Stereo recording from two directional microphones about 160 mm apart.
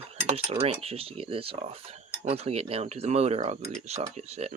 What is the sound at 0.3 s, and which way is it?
Speech, 40° right (ahead or behind).